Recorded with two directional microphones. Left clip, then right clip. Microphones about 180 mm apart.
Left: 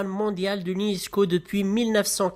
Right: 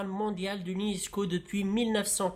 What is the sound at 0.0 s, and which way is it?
Speech, 35° left (ahead or behind).